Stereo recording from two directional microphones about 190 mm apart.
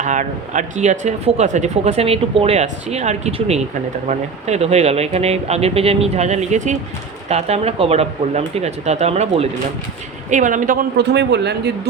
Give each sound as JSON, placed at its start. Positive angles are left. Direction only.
{"t": 0.0, "sound": "speech", "side_deg": -40}